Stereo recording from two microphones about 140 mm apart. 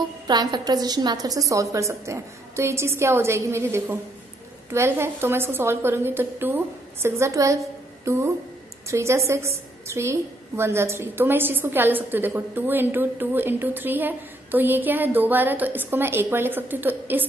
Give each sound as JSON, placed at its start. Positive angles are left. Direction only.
{"t": 0.3, "sound": "a woman's voice", "side_deg": -30}